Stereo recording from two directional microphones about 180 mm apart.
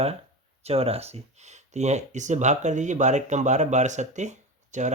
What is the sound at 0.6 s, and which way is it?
Speech, 35° right (ahead or behind).